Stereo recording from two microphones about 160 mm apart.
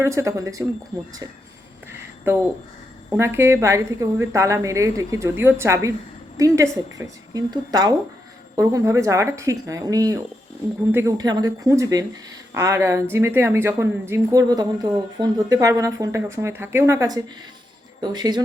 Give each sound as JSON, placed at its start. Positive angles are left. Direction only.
{"t": 0.0, "sound": "speech", "side_deg": -20}
{"t": 3.1, "sound": "a woman's voice", "side_deg": -15}